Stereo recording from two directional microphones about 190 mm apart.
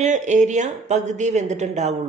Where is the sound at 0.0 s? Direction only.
40° right (ahead or behind).